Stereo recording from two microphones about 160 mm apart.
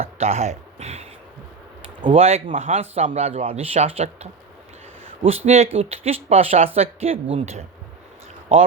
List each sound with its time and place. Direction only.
0.0 s speech: 40° right (ahead or behind)